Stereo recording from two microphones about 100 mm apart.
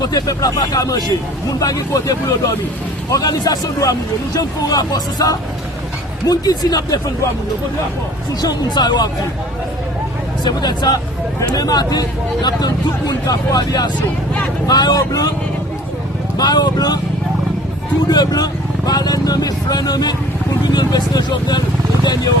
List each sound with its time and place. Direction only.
0.1 s speech: 35° left (ahead or behind)
8.4 s speech: 45° left (ahead or behind)
10.4 s speech: 45° left (ahead or behind)
16.4 s speech: 40° left (ahead or behind)
18.1 s speech: 40° left (ahead or behind)